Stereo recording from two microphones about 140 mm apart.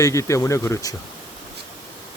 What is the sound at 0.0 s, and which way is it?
Speech, 20° left (ahead or behind).